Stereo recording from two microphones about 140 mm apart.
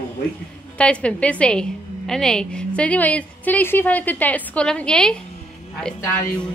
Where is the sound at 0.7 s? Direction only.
10° left (ahead or behind).